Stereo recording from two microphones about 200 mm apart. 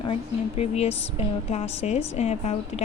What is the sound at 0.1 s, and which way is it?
A woman's voice, 30° left (ahead or behind).